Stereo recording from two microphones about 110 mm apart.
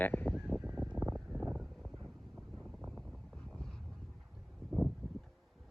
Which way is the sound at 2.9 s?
5° left (ahead or behind).